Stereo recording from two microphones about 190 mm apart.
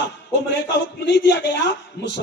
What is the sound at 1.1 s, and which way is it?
Speech, 70° left (ahead or behind).